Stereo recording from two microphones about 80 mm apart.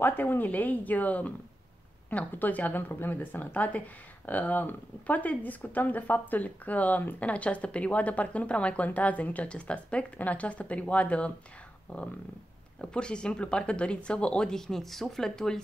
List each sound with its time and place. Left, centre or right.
0.0 s a woman's voice: left; by 15.6 s centre